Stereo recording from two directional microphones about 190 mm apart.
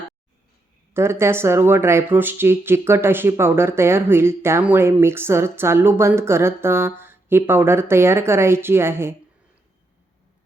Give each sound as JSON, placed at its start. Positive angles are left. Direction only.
{"t": 0.9, "sound": "speech", "side_deg": -15}